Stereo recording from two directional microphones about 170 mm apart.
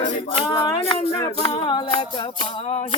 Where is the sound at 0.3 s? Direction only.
30° left (ahead or behind).